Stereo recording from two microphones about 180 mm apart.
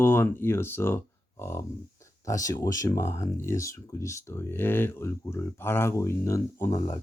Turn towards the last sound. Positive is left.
turn(degrees=15)  # may be behind; listen again after turning